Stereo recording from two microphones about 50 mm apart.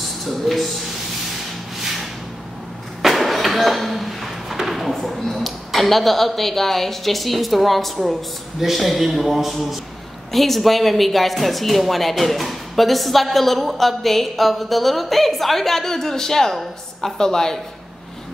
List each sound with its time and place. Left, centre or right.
0.0 s rub: centre
3.0 s speech: centre